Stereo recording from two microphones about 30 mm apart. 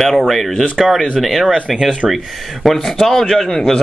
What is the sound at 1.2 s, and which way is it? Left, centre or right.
Speech, centre.